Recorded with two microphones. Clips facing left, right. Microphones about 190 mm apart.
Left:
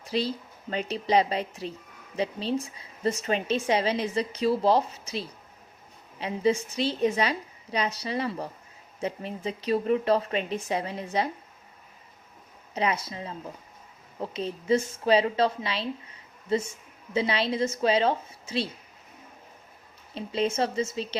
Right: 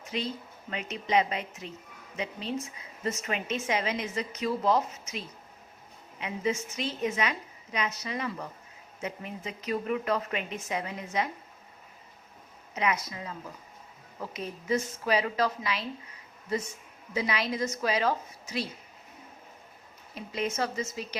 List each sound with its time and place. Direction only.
0.0 s a woman's voice: 35° left (ahead or behind)
12.7 s a woman's voice: 30° left (ahead or behind)
20.1 s a woman's voice: 30° left (ahead or behind)